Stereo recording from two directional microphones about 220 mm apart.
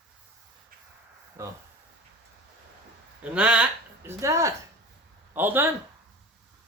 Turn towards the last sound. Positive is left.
turn(degrees=-10)  # may be behind; listen again after turning